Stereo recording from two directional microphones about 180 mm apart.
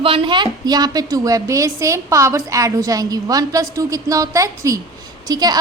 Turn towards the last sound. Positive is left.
turn(degrees=-20)  # may be behind; listen again after turning